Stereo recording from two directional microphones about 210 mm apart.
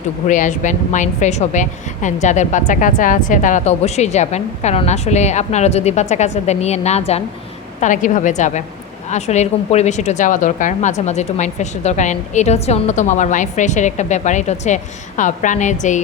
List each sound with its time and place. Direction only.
0.3 s speech: 35° left (ahead or behind)